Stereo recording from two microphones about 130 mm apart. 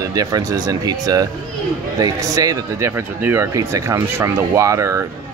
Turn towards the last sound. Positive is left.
turn(degrees=-25)  # may be behind; listen again after turning